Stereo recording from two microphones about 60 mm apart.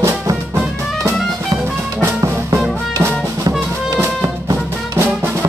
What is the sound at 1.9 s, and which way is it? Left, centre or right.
Music, right.